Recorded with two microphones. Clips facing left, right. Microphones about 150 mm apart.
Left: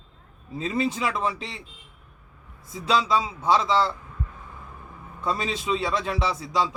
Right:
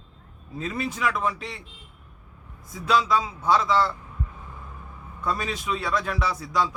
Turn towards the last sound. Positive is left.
turn(degrees=25)  # may be behind; listen again after turning